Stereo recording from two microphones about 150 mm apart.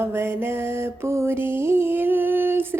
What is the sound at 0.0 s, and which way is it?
Mantra, 15° right (ahead or behind).